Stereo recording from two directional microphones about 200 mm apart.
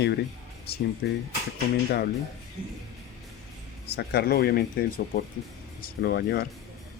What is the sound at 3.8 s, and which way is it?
Speech, 55° left (ahead or behind).